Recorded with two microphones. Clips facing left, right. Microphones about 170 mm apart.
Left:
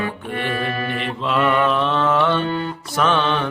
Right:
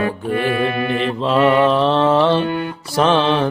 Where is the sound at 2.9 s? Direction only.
30° right (ahead or behind).